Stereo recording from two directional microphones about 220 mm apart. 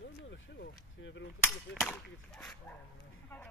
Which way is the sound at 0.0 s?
55° left (ahead or behind).